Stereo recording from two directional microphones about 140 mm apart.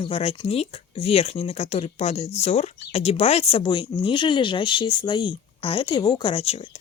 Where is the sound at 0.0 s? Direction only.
45° left (ahead or behind).